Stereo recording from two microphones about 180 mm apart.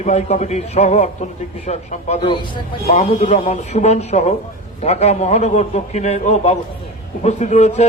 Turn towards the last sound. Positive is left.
turn(degrees=35)  # may be behind; listen again after turning